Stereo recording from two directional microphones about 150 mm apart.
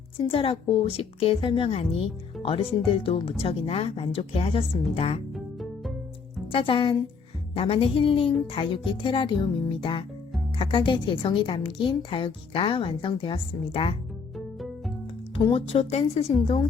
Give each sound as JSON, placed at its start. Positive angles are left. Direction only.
{"t": 0.3, "sound": "a woman's voice", "side_deg": 35}
{"t": 5.3, "sound": "music", "side_deg": 0}
{"t": 6.5, "sound": "a woman's voice", "side_deg": 35}
{"t": 14.3, "sound": "music", "side_deg": 0}
{"t": 15.4, "sound": "speech", "side_deg": 40}